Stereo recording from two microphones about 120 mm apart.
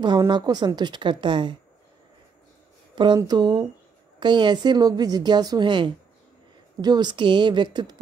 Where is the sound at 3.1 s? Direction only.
35° right (ahead or behind).